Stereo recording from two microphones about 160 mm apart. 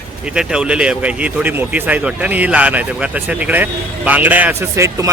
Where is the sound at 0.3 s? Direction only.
5° right (ahead or behind).